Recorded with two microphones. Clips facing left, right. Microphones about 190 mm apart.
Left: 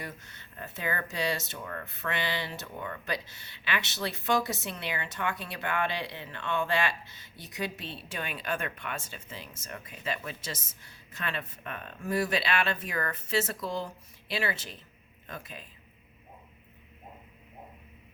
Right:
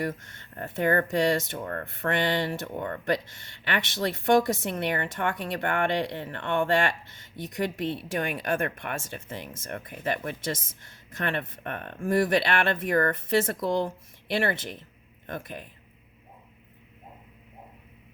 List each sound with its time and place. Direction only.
0.0 s speech: 55° right (ahead or behind)